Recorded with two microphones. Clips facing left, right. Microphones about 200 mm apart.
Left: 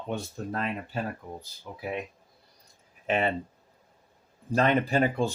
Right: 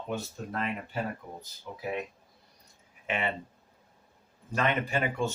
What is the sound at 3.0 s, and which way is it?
Speech, 40° left (ahead or behind).